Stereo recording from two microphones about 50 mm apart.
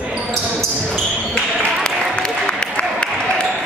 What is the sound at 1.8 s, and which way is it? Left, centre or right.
Applause, centre.